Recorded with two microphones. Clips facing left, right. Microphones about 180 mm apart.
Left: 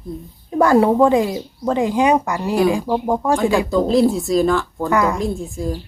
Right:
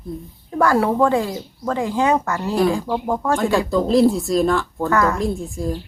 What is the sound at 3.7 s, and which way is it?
Speech, centre (ahead or behind).